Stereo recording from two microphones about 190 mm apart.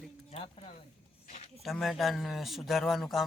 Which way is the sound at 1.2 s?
40° left (ahead or behind).